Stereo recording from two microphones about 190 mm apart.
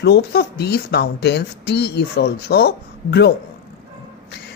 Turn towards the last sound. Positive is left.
turn(degrees=60)  # may be behind; listen again after turning